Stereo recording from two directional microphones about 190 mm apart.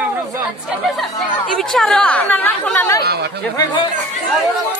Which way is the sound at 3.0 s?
60° right (ahead or behind).